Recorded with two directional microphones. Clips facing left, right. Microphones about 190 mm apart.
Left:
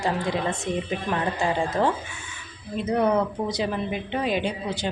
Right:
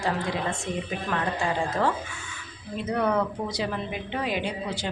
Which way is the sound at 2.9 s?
20° left (ahead or behind).